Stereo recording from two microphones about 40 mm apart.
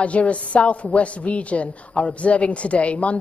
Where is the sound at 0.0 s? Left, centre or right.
Left.